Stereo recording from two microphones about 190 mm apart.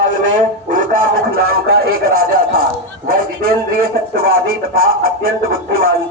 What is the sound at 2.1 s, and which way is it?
Speech, 50° right (ahead or behind).